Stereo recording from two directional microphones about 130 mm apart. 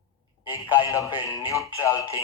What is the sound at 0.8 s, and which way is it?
Speech, 25° left (ahead or behind).